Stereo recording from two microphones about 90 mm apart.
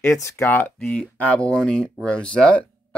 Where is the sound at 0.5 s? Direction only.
20° left (ahead or behind).